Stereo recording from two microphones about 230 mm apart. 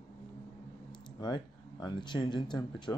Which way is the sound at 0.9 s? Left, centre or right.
Centre.